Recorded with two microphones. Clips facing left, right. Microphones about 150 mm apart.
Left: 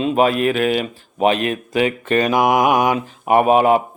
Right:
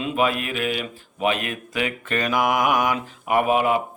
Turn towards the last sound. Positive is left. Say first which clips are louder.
# left 6 dB
turn(degrees=35)  # may be behind; listen again after turning